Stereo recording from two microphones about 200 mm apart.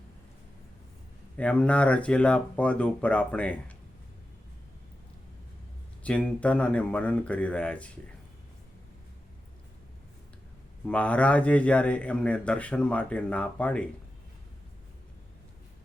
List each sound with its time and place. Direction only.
1.4 s speech: 5° left (ahead or behind)
6.0 s speech: 5° left (ahead or behind)
10.8 s speech: 5° left (ahead or behind)